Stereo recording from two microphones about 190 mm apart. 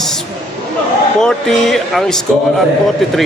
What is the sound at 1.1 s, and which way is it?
A man's voice, 5° left (ahead or behind).